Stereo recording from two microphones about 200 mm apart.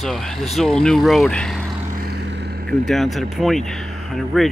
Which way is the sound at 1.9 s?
55° right (ahead or behind).